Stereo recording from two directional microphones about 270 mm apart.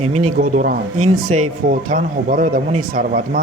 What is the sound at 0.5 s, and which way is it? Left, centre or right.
Speech, right.